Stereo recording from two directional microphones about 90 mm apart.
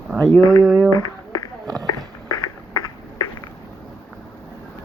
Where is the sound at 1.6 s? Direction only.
45° right (ahead or behind).